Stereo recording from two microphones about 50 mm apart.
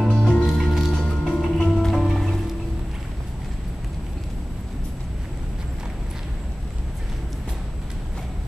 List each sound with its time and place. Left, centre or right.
0.1 s music: centre
0.4 s music: centre
0.9 s music: centre
1.7 s music: centre